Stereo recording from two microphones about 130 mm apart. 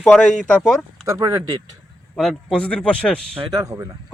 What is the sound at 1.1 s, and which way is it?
Speech, 25° right (ahead or behind).